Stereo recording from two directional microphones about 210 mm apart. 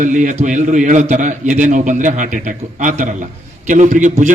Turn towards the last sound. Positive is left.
turn(degrees=-35)  # may be behind; listen again after turning